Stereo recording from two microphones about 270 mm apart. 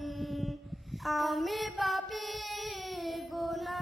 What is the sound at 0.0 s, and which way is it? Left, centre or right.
Child singing, centre.